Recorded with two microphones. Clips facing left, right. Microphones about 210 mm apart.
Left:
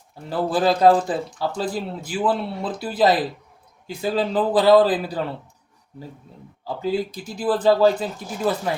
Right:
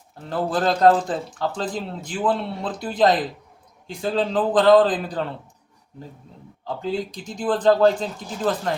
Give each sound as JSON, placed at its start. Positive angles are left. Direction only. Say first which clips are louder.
{"t": 0.3, "sound": "a man's voice", "louder": "left 2 dB", "side_deg": 5}
{"t": 6.7, "sound": "a man's voice", "louder": "left 2 dB", "side_deg": 5}